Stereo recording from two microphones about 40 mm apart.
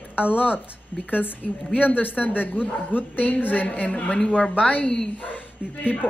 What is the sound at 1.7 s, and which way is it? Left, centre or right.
A woman's voice, left.